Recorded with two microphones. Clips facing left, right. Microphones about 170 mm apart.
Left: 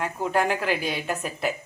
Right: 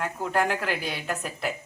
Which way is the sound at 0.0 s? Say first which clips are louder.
Left 2 dB; centre (ahead or behind).